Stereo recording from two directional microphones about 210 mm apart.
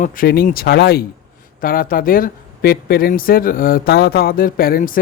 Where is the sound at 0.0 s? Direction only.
45° left (ahead or behind).